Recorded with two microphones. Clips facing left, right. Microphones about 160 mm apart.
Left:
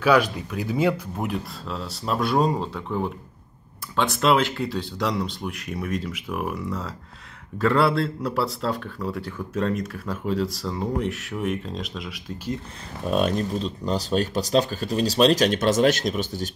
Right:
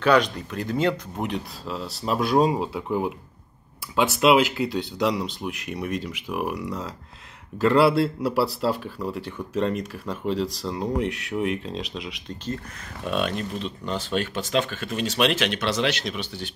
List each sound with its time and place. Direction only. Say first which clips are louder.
0.0 s speech: even; 5° left (ahead or behind)
13.1 s speech: left 4 dB; 40° left (ahead or behind)